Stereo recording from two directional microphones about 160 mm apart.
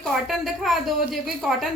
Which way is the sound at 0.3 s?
Centre (ahead or behind).